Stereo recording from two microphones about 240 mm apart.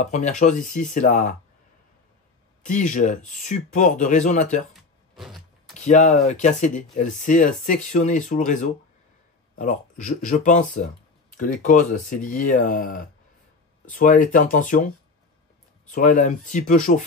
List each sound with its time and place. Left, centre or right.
0.0 s speech: left
2.6 s speech: left
4.7 s a sound: centre
5.8 s speech: left
15.9 s speech: left